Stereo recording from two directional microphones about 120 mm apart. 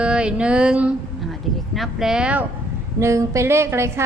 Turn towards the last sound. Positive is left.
turn(degrees=-20)  # may be behind; listen again after turning